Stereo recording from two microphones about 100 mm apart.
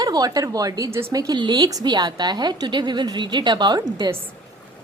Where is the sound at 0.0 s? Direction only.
40° right (ahead or behind).